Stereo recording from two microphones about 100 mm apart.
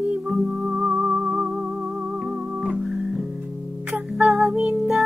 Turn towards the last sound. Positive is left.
turn(degrees=-5)  # may be behind; listen again after turning